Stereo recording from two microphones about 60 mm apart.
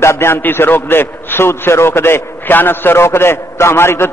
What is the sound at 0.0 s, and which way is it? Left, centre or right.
A man's voice, left.